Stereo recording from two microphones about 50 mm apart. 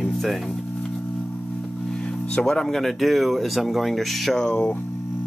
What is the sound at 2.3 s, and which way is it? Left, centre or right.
Speech, centre.